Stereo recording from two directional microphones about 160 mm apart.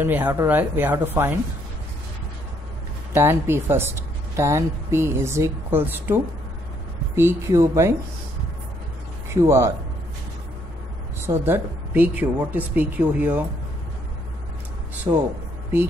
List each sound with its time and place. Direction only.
0.0 s a woman's voice: 10° right (ahead or behind)
3.2 s a woman's voice: 15° right (ahead or behind)
9.3 s a woman's voice: 15° right (ahead or behind)
11.2 s a woman's voice: 15° right (ahead or behind)
15.1 s a woman's voice: 20° right (ahead or behind)